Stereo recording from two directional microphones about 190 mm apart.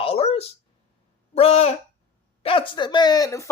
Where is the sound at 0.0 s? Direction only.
30° left (ahead or behind).